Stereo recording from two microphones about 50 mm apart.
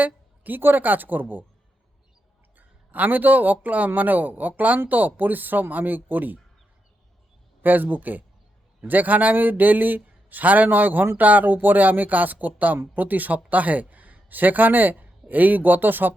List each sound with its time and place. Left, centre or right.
0.0 s speech: right
2.6 s speech: right
7.6 s speech: right